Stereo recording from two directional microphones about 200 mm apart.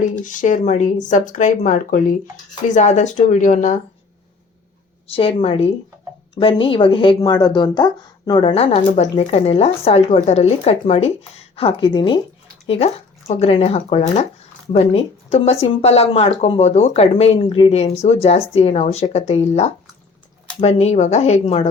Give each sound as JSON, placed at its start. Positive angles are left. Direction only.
{"t": 0.3, "sound": "speech", "side_deg": 40}
{"t": 5.0, "sound": "speech", "side_deg": 30}